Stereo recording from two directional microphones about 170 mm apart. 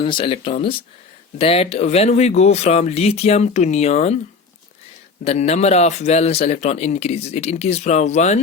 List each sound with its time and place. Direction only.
0.0 s a man's voice: 30° left (ahead or behind)
5.2 s a man's voice: 40° left (ahead or behind)